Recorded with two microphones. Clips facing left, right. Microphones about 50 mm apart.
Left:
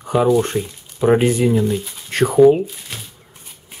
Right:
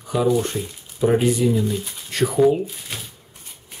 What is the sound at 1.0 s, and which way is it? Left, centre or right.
Speech, left.